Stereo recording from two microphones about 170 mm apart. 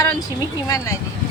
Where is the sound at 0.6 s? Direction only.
15° left (ahead or behind).